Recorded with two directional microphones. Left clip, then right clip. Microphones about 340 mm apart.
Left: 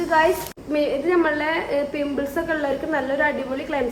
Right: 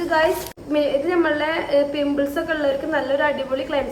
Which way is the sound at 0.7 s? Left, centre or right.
Centre.